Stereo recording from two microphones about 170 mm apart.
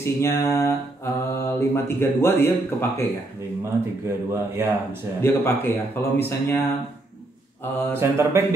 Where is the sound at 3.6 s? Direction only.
15° right (ahead or behind).